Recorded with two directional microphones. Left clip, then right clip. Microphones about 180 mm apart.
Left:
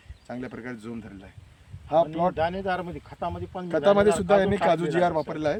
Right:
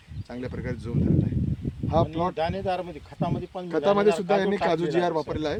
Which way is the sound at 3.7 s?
25° left (ahead or behind).